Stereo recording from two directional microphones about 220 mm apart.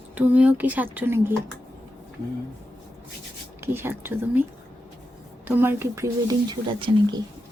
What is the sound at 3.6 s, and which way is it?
Speech, 10° right (ahead or behind).